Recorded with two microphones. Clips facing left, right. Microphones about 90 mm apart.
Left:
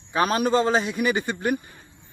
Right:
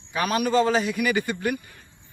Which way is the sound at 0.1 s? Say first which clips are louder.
Left 2 dB; 35° left (ahead or behind).